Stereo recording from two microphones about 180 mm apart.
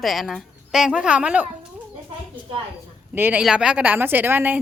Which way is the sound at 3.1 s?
10° right (ahead or behind).